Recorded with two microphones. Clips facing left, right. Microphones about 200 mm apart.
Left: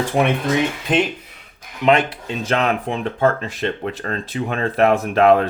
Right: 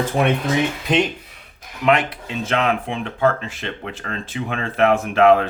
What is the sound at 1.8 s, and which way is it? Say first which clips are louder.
Speech: left 2 dB; 25° left (ahead or behind).